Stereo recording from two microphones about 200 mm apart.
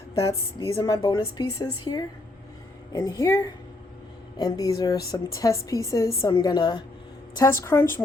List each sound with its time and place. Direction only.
0.2 s a woman's voice: 15° left (ahead or behind)